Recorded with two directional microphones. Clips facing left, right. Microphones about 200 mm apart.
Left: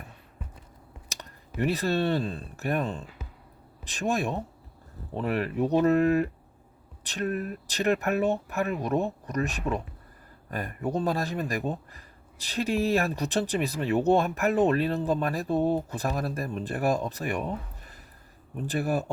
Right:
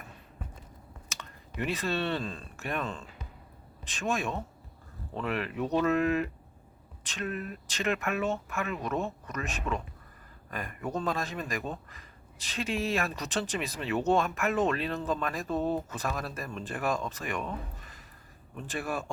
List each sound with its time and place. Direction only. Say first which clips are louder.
1.1 s speech: left 4 dB; 35° left (ahead or behind)
18.5 s speech: left 6 dB; 40° left (ahead or behind)